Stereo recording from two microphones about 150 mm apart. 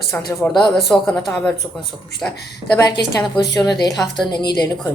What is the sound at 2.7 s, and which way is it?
A woman's voice, 30° left (ahead or behind).